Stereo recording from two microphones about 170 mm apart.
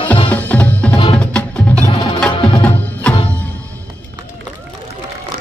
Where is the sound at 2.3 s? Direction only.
30° left (ahead or behind).